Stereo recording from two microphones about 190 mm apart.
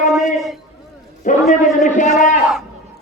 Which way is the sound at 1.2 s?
40° left (ahead or behind).